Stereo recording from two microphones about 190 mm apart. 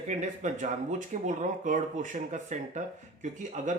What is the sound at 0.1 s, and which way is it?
Speech, 40° right (ahead or behind).